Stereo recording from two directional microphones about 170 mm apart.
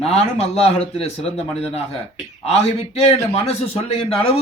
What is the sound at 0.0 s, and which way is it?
A man's voice, 35° left (ahead or behind).